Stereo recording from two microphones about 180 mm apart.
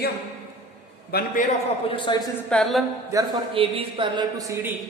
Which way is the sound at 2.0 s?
25° left (ahead or behind).